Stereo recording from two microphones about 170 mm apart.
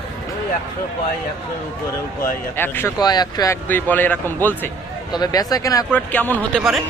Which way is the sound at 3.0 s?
25° left (ahead or behind).